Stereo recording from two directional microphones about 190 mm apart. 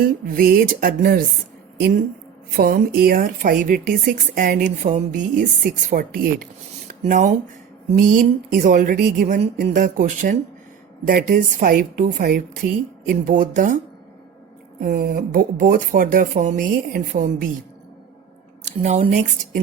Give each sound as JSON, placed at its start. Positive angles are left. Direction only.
{"t": 0.0, "sound": "speech", "side_deg": -50}
{"t": 2.6, "sound": "speech", "side_deg": -50}
{"t": 14.8, "sound": "speech", "side_deg": -45}
{"t": 18.8, "sound": "speech", "side_deg": -40}